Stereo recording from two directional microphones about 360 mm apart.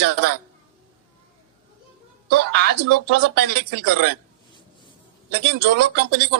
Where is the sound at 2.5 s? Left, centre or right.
Right.